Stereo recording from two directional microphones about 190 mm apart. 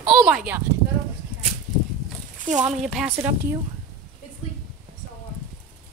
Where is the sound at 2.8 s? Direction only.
Centre (ahead or behind).